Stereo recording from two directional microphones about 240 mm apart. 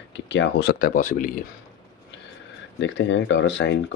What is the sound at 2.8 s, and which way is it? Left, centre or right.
Speech, left.